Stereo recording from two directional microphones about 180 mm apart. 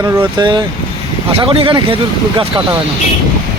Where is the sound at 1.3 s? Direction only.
30° right (ahead or behind).